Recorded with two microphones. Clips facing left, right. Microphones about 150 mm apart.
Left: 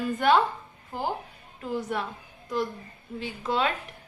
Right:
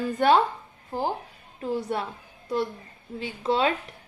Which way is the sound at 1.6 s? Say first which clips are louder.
Right 2 dB; 35° right (ahead or behind).